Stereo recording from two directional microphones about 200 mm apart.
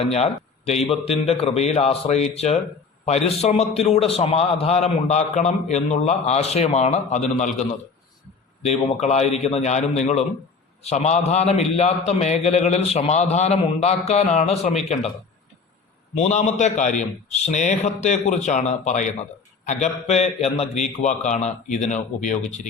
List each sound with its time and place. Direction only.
0.0 s a man's voice: 30° left (ahead or behind)
8.6 s a man's voice: 35° left (ahead or behind)
16.1 s a man's voice: 35° left (ahead or behind)